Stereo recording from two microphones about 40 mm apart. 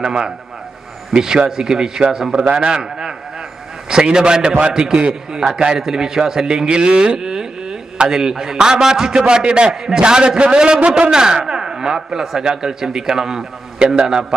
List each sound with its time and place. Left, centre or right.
0.0 s a man's voice: centre
2.8 s a sound: centre
3.9 s a man's voice: centre